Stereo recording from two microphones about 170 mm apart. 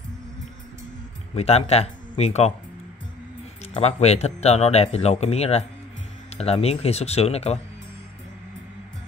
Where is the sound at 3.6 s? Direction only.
40° left (ahead or behind).